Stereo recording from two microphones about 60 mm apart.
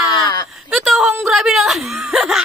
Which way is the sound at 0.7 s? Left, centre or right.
Centre.